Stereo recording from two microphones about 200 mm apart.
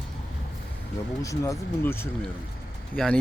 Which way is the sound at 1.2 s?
15° left (ahead or behind).